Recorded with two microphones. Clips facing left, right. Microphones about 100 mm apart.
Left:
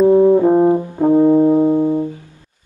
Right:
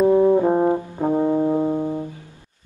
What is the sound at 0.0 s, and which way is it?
Brass instrument, 10° left (ahead or behind).